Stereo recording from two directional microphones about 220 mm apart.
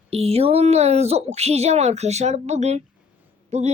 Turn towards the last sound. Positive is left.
turn(degrees=-30)  # may be behind; listen again after turning